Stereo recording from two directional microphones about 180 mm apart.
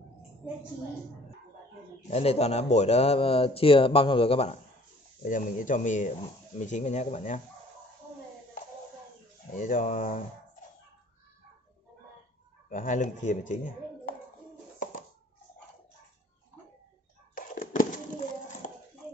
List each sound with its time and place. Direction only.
2.0 s speech: 35° left (ahead or behind)
5.2 s speech: 45° left (ahead or behind)
9.5 s speech: 45° left (ahead or behind)
12.6 s speech: 45° left (ahead or behind)
17.4 s a sound: 50° left (ahead or behind)